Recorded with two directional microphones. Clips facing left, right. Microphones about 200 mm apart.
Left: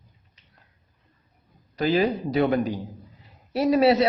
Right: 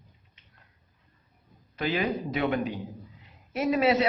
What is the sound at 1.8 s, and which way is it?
A man's voice, 35° left (ahead or behind).